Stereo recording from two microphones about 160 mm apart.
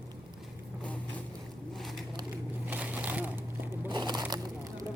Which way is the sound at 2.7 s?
10° right (ahead or behind).